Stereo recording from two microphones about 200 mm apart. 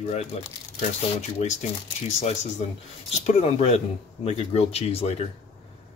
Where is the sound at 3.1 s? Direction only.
30° left (ahead or behind).